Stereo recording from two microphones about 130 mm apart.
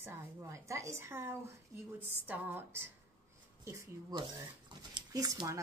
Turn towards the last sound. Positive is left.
turn(degrees=-30)  # may be behind; listen again after turning